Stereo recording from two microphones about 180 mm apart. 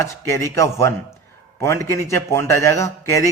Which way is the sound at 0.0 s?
15° left (ahead or behind).